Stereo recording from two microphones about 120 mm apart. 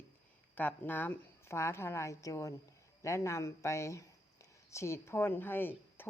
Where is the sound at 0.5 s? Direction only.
15° left (ahead or behind).